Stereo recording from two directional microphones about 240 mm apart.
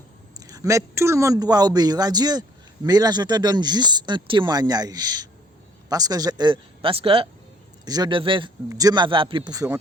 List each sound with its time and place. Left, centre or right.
0.3 s speech: centre